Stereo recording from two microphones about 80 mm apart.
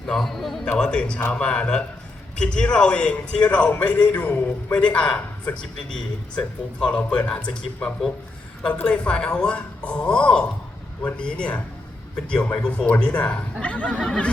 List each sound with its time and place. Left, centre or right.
0.0 s a man's voice: centre
8.6 s a man's voice: centre